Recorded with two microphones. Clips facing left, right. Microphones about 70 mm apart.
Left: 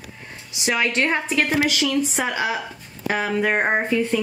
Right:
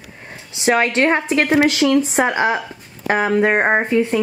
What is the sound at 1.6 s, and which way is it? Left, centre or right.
Speech, right.